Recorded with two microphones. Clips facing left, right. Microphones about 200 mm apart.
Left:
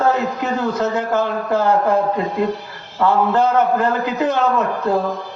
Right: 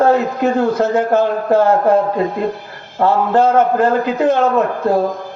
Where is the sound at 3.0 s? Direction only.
50° right (ahead or behind).